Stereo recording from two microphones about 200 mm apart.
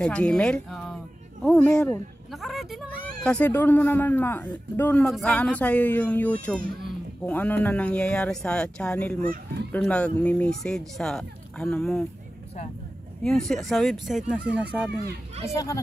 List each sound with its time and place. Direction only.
0.0 s a sound: 5° left (ahead or behind)
3.3 s speech: 5° left (ahead or behind)
13.2 s speech: centre (ahead or behind)
15.4 s speech: 15° left (ahead or behind)